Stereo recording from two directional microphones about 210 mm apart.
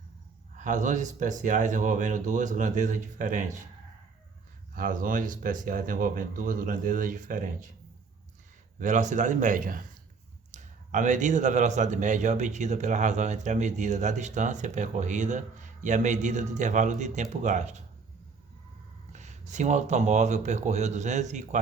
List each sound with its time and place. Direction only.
0.5 s a man's voice: 35° right (ahead or behind)
4.7 s a man's voice: 40° right (ahead or behind)
8.8 s a man's voice: 35° right (ahead or behind)
19.1 s a man's voice: 35° right (ahead or behind)